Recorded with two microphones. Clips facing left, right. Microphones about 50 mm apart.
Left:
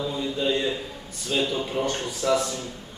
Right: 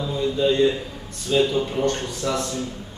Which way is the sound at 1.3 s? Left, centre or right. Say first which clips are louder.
Right 5 dB; centre.